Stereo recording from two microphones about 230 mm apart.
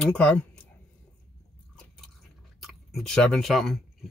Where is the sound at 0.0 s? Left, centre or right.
Centre.